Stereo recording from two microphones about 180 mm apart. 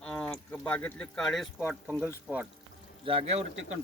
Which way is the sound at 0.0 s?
5° left (ahead or behind).